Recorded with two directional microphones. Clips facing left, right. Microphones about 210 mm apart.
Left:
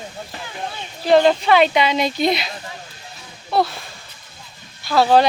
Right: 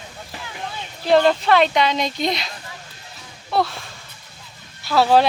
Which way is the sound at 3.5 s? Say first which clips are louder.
Left 2 dB; centre (ahead or behind).